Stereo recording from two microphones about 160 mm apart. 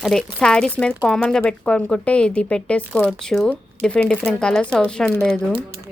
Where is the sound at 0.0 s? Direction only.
5° left (ahead or behind).